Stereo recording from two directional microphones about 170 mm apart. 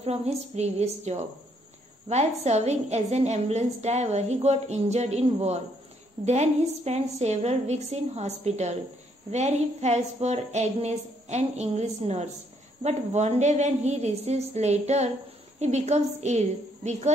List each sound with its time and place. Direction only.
0.0 s a woman's voice: 40° right (ahead or behind)